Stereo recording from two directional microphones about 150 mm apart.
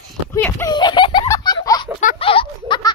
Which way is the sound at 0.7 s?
30° left (ahead or behind).